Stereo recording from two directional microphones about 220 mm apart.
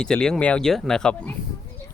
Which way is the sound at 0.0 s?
5° left (ahead or behind).